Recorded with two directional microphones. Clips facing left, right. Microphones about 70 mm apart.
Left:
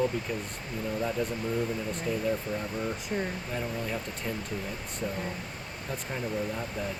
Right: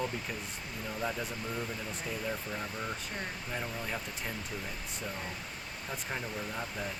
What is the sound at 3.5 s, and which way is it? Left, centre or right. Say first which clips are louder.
Speech: left 3 dB; centre.